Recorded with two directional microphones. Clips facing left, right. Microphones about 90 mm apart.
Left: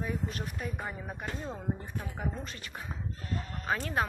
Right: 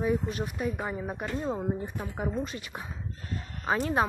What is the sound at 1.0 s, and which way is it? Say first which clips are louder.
A woman's voice: right 7 dB; 15° right (ahead or behind).